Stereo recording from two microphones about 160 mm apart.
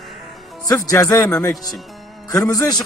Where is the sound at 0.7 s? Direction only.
20° left (ahead or behind).